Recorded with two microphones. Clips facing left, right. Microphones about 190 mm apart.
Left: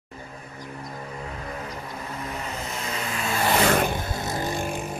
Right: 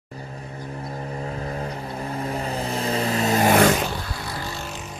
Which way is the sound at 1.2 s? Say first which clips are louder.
Right 6 dB; 35° right (ahead or behind).